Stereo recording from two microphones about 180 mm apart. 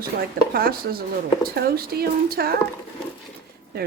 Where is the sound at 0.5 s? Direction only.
55° right (ahead or behind).